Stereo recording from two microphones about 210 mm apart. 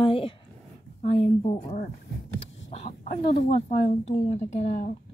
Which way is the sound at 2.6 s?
30° left (ahead or behind).